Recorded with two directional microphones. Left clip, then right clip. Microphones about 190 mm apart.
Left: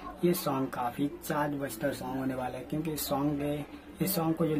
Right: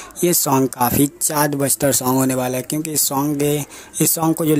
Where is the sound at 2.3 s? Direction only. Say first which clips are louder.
Right 14 dB; 35° right (ahead or behind).